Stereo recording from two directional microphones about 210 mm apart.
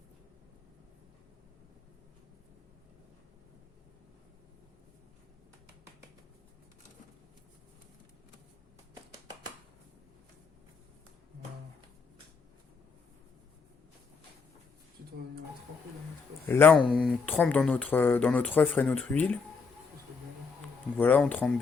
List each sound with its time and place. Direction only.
16.5 s speech: 10° left (ahead or behind)
21.0 s speech: 5° left (ahead or behind)